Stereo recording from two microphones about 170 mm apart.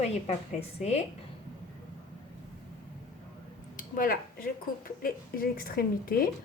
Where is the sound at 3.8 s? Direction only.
55° left (ahead or behind).